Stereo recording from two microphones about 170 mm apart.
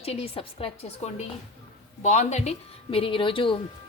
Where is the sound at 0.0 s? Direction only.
35° left (ahead or behind).